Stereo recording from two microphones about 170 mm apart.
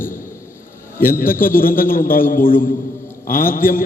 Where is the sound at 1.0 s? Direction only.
55° left (ahead or behind).